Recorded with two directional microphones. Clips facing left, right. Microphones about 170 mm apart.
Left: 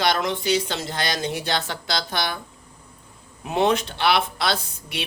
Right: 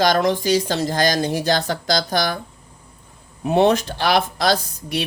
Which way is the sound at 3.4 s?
35° right (ahead or behind).